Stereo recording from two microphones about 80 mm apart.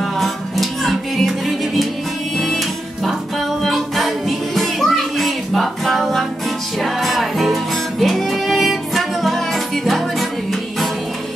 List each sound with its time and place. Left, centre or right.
0.0 s music: centre